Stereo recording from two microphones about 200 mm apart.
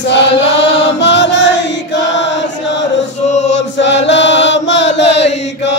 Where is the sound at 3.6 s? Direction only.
60° left (ahead or behind).